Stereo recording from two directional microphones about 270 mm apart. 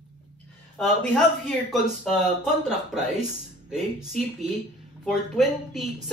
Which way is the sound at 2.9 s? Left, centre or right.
Centre.